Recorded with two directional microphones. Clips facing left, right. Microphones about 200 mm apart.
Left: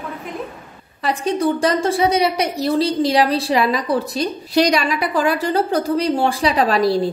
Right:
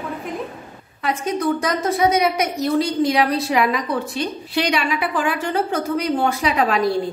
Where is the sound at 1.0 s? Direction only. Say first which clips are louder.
Left 2 dB; 30° left (ahead or behind).